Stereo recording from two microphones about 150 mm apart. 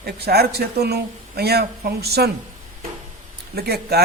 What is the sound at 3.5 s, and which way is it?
Speech, 90° right.